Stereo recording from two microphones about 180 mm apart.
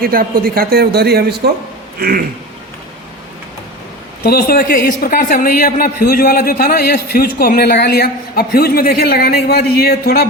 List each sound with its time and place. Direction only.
0.0 s a man's voice: 55° right (ahead or behind)
4.2 s a man's voice: 60° left (ahead or behind)